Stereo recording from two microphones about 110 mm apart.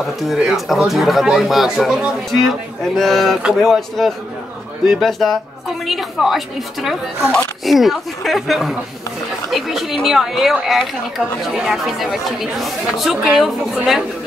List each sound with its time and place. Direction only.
0.0 s speech: centre (ahead or behind)